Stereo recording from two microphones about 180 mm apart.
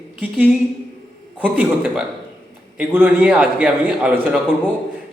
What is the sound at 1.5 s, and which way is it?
A man's voice, 10° right (ahead or behind).